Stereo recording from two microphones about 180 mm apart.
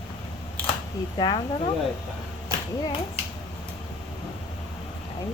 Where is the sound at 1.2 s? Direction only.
25° left (ahead or behind).